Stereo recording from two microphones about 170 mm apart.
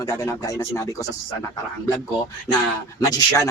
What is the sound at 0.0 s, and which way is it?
Speech, 20° left (ahead or behind).